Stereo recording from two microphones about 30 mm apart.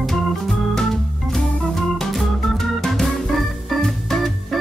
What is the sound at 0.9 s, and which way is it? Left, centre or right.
Organ, centre.